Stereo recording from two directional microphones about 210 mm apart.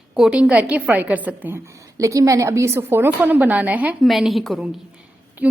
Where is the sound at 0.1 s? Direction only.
5° right (ahead or behind).